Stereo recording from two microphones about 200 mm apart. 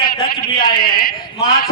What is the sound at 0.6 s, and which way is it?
Speech, 50° left (ahead or behind).